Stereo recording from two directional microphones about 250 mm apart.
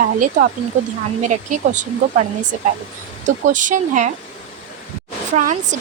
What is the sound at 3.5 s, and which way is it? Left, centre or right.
Speech, right.